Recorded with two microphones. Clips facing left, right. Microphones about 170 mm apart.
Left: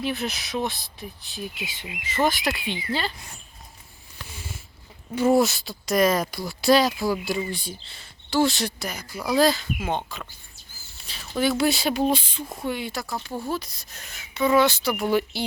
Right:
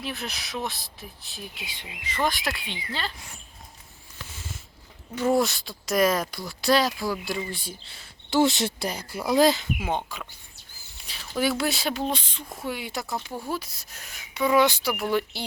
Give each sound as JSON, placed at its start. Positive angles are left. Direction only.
{"t": 0.0, "sound": "speech", "side_deg": 0}
{"t": 5.1, "sound": "speech", "side_deg": 10}
{"t": 8.3, "sound": "speech", "side_deg": -20}
{"t": 12.5, "sound": "speech", "side_deg": -5}
{"t": 12.9, "sound": "speech", "side_deg": -20}
{"t": 13.5, "sound": "speech", "side_deg": -5}
{"t": 15.0, "sound": "speech", "side_deg": 0}